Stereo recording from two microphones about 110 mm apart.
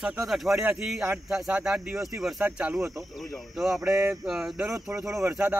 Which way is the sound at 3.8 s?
30° right (ahead or behind).